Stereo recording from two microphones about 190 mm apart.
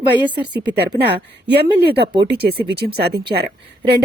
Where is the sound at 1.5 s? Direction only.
60° right (ahead or behind).